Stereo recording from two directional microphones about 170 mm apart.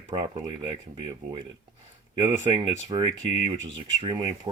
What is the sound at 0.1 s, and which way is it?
Speech, 30° right (ahead or behind).